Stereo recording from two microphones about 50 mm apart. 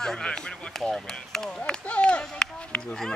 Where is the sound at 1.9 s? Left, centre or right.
Left.